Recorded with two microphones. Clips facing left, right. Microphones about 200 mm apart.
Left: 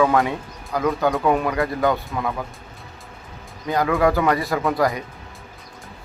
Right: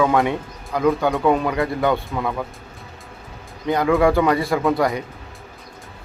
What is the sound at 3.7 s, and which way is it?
Speech, 20° right (ahead or behind).